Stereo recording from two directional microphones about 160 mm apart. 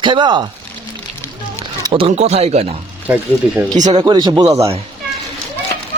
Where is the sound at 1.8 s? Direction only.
30° right (ahead or behind).